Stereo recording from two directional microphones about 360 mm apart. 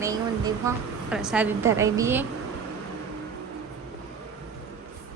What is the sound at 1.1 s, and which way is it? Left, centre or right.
A woman's voice, centre.